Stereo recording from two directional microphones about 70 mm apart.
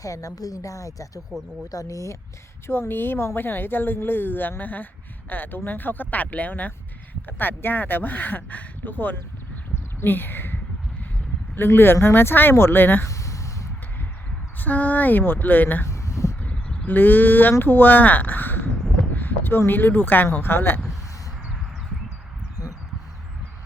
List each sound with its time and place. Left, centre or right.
0.0 s a woman's voice: left
2.6 s speech: left
13.1 s a sound: left
14.6 s speech: left
15.9 s a sound: left
16.8 s speech: left